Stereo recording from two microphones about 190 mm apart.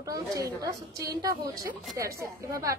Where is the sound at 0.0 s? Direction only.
20° right (ahead or behind).